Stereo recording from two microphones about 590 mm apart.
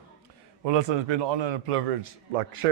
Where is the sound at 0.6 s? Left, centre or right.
Right.